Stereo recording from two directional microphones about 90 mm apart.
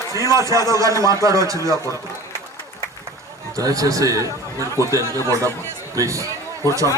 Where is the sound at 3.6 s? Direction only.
40° right (ahead or behind).